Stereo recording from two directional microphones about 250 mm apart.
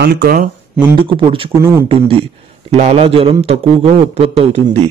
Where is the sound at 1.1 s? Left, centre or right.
Right.